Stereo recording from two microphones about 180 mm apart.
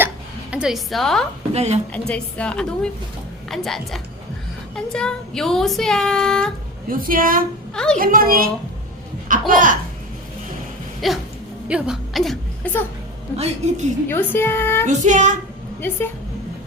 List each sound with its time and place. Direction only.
0.5 s music: 5° right (ahead or behind)
1.5 s a woman's voice: 35° right (ahead or behind)
1.9 s music: 5° left (ahead or behind)
6.9 s a woman's voice: 50° right (ahead or behind)
7.7 s a sound: 5° left (ahead or behind)
7.9 s a woman's voice: 50° right (ahead or behind)
9.5 s a woman's voice: 50° right (ahead or behind)
11.0 s music: centre (ahead or behind)
11.7 s a woman's voice: centre (ahead or behind)
13.3 s a woman's voice: 35° right (ahead or behind)
14.1 s music: 10° left (ahead or behind)
14.8 s a woman's voice: 45° right (ahead or behind)